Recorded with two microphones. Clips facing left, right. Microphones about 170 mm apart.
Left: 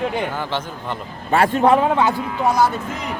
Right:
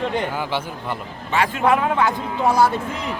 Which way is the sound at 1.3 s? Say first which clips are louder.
Left 4 dB; 35° left (ahead or behind).